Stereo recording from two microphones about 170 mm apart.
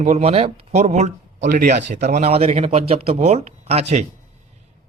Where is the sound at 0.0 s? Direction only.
40° right (ahead or behind).